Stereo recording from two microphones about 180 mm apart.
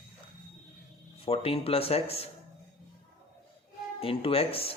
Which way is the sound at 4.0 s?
30° left (ahead or behind).